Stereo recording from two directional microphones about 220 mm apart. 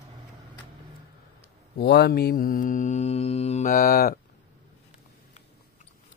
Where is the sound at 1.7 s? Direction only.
50° left (ahead or behind).